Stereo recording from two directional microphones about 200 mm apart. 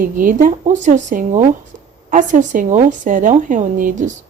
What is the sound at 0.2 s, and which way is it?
A woman's voice, 40° right (ahead or behind).